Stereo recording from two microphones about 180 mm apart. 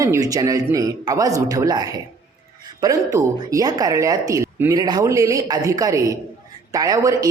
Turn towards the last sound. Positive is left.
turn(degrees=-20)  # may be behind; listen again after turning